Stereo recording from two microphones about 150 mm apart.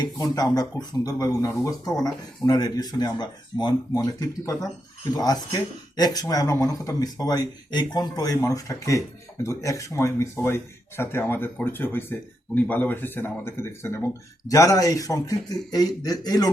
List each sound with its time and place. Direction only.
0.0 s speech: 25° left (ahead or behind)